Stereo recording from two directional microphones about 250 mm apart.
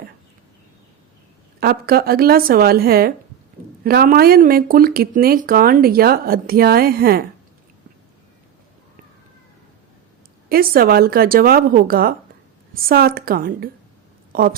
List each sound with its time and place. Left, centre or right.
1.6 s speech: right
10.5 s a woman's voice: right